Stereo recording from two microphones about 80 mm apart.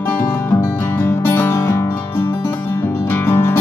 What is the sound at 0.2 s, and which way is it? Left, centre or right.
Music, left.